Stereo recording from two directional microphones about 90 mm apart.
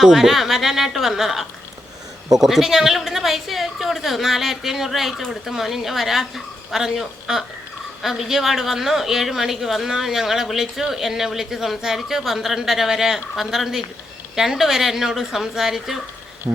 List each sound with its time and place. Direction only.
0.0 s speech: 5° right (ahead or behind)
16.5 s speech: 40° right (ahead or behind)